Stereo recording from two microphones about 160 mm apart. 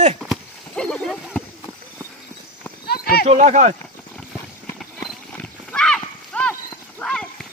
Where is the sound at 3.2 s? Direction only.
45° right (ahead or behind).